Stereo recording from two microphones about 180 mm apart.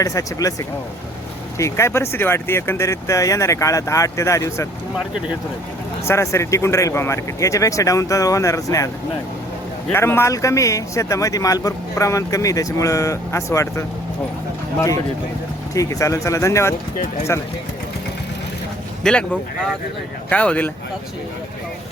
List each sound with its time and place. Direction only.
0.0 s speech: 20° left (ahead or behind)
1.5 s a man's voice: 15° left (ahead or behind)
6.1 s a man's voice: 15° left (ahead or behind)
9.9 s a man's voice: 15° left (ahead or behind)
15.7 s a man's voice: 20° left (ahead or behind)
19.0 s a man's voice: 5° left (ahead or behind)